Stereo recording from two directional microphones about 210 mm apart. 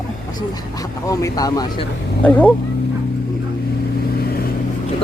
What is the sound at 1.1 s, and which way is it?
Speech, 15° left (ahead or behind).